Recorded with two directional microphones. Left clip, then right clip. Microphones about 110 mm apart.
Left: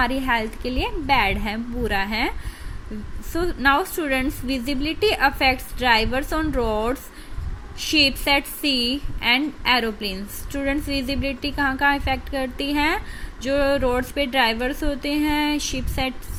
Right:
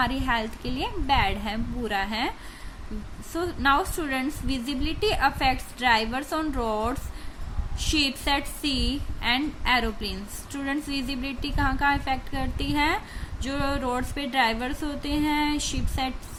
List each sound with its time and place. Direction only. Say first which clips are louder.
0.0 s a woman's voice: left 4 dB; 20° left (ahead or behind)
3.3 s a woman's voice: left 4 dB; 25° left (ahead or behind)